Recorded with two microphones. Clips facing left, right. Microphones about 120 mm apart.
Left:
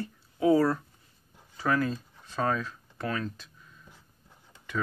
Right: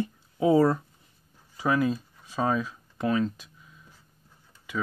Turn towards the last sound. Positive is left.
turn(degrees=-10)  # may be behind; listen again after turning